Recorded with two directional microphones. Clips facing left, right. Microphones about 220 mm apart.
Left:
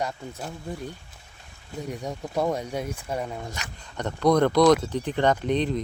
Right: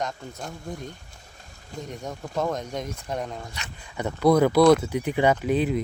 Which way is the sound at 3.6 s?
45° left (ahead or behind).